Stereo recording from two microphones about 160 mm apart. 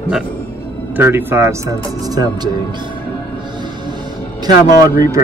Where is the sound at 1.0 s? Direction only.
15° right (ahead or behind).